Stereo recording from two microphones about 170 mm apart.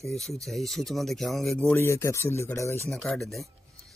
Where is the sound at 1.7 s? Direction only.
15° left (ahead or behind).